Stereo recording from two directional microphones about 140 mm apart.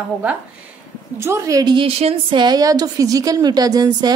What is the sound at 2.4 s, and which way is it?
A woman's voice, 25° right (ahead or behind).